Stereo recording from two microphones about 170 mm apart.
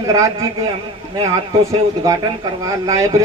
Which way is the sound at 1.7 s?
20° right (ahead or behind).